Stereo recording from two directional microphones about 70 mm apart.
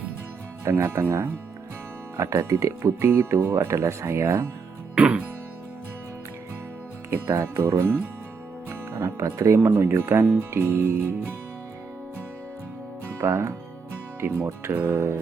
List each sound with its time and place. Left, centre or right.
0.6 s speech: right
4.9 s music: centre
7.1 s speech: right
13.1 s speech: right